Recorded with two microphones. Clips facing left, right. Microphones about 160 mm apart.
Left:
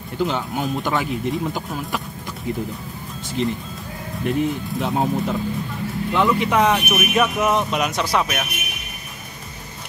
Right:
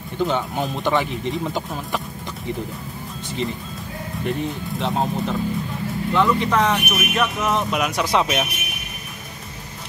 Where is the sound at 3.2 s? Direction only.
Centre (ahead or behind).